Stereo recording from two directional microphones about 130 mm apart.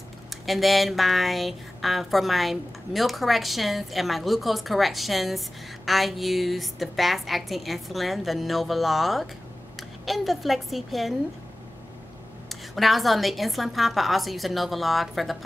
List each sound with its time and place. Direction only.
0.3 s a woman's voice: centre (ahead or behind)
12.4 s speech: centre (ahead or behind)